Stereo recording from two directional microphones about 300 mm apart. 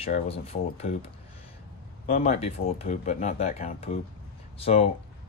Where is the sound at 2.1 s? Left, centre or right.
Left.